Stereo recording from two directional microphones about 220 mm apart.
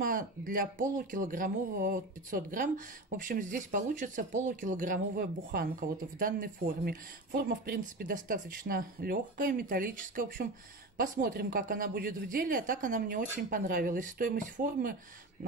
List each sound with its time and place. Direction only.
0.0 s speech: 40° right (ahead or behind)